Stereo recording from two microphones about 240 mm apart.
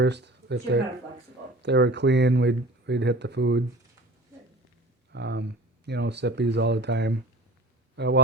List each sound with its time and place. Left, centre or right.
0.0 s speech: right
5.1 s speech: right